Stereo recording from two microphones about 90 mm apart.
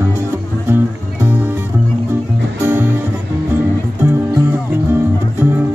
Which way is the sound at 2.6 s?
20° right (ahead or behind).